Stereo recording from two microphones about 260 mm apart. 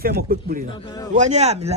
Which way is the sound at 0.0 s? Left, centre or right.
Right.